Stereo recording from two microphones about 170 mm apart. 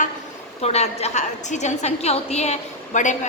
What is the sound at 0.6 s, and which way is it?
A woman's voice, 40° left (ahead or behind).